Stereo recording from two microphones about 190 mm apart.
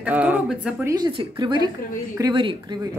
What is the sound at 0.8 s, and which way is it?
Speech, 20° right (ahead or behind).